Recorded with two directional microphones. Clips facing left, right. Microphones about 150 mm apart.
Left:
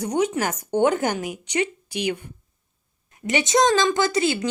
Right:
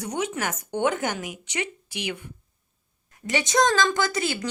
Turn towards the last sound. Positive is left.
turn(degrees=25)  # may be behind; listen again after turning